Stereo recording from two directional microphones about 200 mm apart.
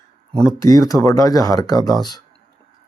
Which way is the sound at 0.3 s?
5° left (ahead or behind).